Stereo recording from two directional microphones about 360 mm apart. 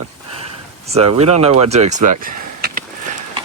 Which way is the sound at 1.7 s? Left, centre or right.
Centre.